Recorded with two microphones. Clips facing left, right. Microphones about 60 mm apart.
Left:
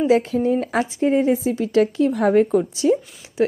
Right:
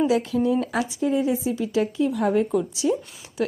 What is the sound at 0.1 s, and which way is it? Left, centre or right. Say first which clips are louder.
Speech: left 4 dB; left.